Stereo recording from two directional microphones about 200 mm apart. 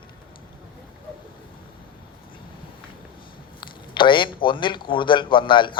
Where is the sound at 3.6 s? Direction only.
25° left (ahead or behind).